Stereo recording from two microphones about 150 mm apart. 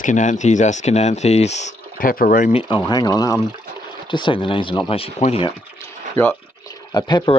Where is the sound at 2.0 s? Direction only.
70° left (ahead or behind).